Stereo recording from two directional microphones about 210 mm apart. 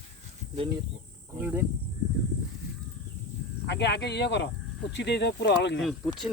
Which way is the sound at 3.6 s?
55° left (ahead or behind).